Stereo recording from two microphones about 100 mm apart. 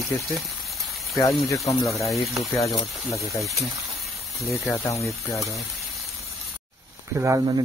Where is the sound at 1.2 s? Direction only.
35° left (ahead or behind).